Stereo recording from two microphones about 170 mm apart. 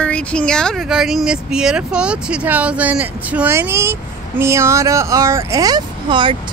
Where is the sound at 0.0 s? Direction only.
5° left (ahead or behind).